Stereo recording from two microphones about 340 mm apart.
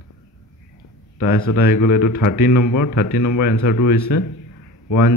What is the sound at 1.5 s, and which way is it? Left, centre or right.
A man's voice, left.